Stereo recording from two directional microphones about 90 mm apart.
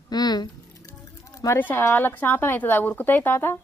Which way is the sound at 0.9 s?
40° left (ahead or behind).